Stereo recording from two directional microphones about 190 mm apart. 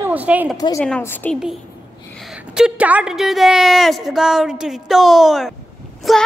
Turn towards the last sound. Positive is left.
turn(degrees=0)  # may be behind; listen again after turning